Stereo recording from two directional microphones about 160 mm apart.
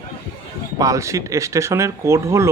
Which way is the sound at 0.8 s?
20° right (ahead or behind).